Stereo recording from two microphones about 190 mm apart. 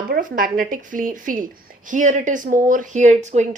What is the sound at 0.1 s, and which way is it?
A woman's voice, 45° right (ahead or behind).